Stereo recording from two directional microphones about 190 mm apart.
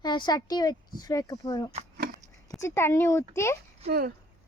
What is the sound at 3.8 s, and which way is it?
Speech, 50° right (ahead or behind).